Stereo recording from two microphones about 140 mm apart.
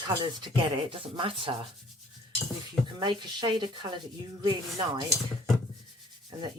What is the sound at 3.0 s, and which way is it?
Speech, 35° right (ahead or behind).